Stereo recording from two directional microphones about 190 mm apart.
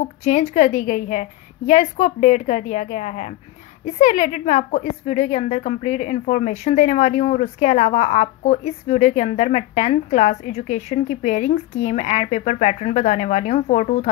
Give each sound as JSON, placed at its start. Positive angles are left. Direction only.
{"t": 0.2, "sound": "a woman's voice", "side_deg": 40}